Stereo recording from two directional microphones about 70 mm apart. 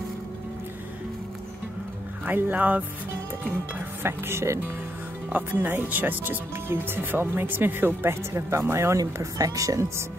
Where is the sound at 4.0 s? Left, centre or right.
Right.